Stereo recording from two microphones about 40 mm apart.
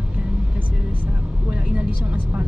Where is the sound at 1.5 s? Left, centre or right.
Right.